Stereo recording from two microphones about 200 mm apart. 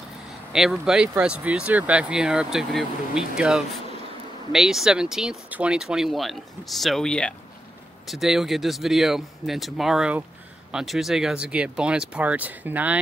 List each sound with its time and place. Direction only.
0.5 s speech: centre (ahead or behind)